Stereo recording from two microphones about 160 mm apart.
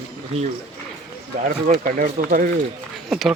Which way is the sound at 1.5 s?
50° right (ahead or behind).